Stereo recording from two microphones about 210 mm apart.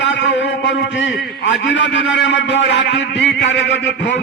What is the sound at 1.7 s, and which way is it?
A man's voice, 60° left (ahead or behind).